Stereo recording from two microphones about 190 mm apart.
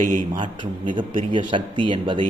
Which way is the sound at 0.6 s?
25° right (ahead or behind).